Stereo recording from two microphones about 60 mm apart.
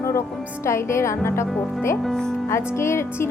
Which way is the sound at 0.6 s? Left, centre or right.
Left.